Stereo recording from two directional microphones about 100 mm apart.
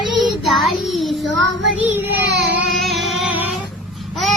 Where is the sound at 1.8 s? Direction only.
20° right (ahead or behind).